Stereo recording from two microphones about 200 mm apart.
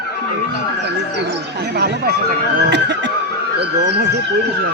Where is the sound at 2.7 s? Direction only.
60° right (ahead or behind).